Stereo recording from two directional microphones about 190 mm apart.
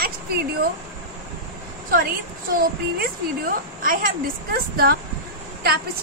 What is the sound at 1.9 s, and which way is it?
A woman's voice, 50° right (ahead or behind).